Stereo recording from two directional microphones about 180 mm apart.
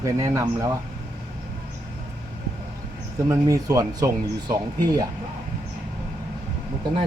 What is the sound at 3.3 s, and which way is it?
Speech, 20° right (ahead or behind).